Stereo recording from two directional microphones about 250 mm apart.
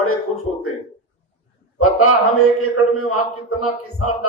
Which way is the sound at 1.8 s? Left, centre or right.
Left.